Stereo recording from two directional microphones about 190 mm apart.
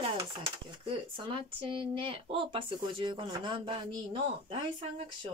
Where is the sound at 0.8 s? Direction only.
30° right (ahead or behind).